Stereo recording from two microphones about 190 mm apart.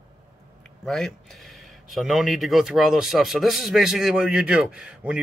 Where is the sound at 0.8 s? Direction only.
Centre (ahead or behind).